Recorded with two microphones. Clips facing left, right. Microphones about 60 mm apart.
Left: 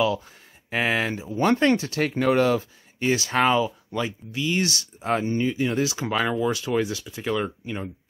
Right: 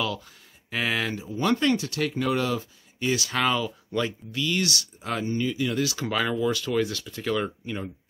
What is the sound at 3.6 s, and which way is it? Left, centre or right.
Speech, centre.